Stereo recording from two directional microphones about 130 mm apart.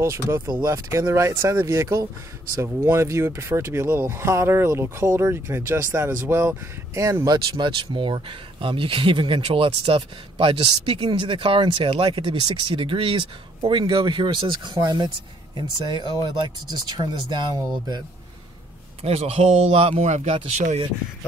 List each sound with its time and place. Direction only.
0.0 s speech: 20° right (ahead or behind)
0.5 s speech: 30° right (ahead or behind)
0.8 s speech: 20° right (ahead or behind)
19.0 s speech: 55° right (ahead or behind)